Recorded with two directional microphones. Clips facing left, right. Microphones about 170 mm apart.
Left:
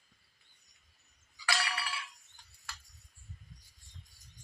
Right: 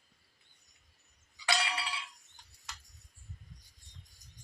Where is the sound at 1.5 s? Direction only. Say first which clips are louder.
Right 2 dB; 20° right (ahead or behind).